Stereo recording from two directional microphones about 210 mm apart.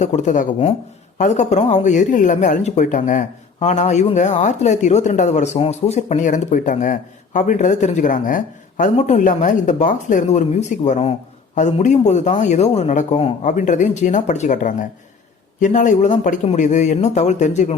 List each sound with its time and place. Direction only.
0.0 s speech: 35° left (ahead or behind)